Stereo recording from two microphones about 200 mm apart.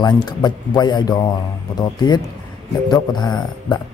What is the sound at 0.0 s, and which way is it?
Speech, 20° left (ahead or behind).